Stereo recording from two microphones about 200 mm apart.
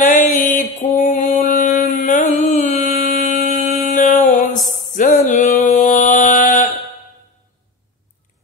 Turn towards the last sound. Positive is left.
turn(degrees=40)  # may be behind; listen again after turning